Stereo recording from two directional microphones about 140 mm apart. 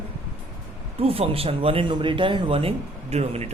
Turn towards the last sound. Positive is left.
turn(degrees=-50)  # may be behind; listen again after turning